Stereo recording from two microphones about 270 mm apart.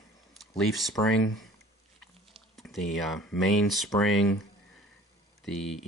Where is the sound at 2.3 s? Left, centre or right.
Centre.